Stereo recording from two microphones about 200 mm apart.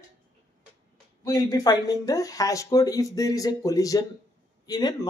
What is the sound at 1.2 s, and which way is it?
A man's voice, 20° left (ahead or behind).